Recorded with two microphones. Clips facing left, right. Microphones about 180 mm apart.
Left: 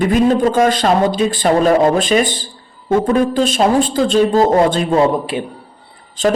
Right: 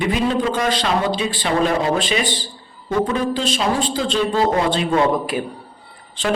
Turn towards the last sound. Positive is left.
turn(degrees=40)  # may be behind; listen again after turning